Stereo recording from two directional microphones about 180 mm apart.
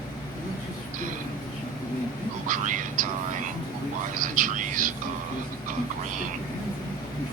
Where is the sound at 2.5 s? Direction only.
45° right (ahead or behind).